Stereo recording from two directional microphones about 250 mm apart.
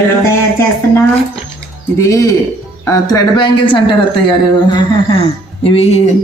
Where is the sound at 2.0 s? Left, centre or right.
Centre.